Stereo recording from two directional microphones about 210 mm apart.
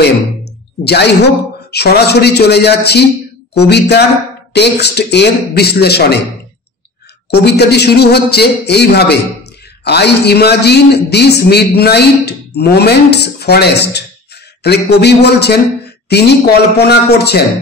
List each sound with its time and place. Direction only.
0.8 s a man's voice: 50° left (ahead or behind)
7.2 s a man's voice: 50° left (ahead or behind)